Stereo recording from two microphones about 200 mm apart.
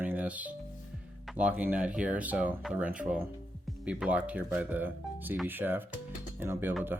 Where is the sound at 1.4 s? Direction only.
5° right (ahead or behind).